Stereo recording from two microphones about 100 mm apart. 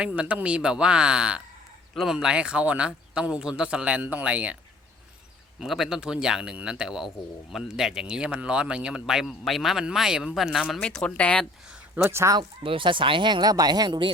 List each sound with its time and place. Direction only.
0.0 s a man's voice: 10° right (ahead or behind)
5.5 s a man's voice: centre (ahead or behind)
10.8 s speech: 10° left (ahead or behind)
12.1 s speech: 30° right (ahead or behind)
12.4 s speech: 60° right (ahead or behind)